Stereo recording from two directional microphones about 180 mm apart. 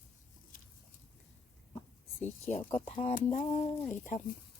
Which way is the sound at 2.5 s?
35° left (ahead or behind).